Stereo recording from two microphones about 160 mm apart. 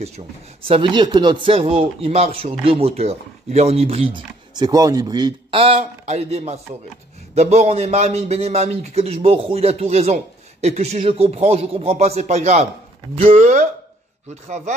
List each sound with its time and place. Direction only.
0.7 s a man's voice: 30° right (ahead or behind); by 13.7 s 50° right (ahead or behind)